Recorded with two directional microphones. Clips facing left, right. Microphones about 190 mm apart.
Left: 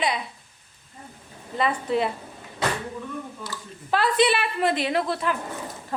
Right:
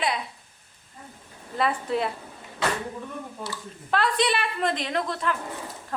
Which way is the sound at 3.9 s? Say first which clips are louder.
Left 3 dB; 5° left (ahead or behind).